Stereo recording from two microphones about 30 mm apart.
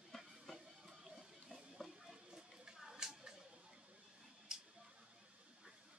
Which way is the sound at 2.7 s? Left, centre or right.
Centre.